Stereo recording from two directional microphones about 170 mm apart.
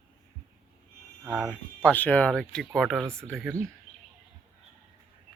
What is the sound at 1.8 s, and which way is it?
Speech, 10° left (ahead or behind).